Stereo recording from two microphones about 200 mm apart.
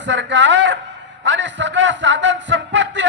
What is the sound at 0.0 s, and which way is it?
A man's voice, 65° right (ahead or behind).